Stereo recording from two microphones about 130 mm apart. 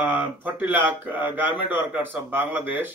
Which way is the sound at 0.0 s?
15° right (ahead or behind).